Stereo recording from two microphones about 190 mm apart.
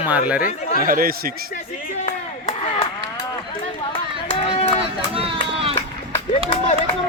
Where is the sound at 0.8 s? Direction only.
50° right (ahead or behind).